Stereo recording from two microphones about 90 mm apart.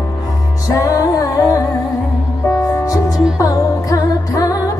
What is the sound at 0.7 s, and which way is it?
Music, 40° left (ahead or behind).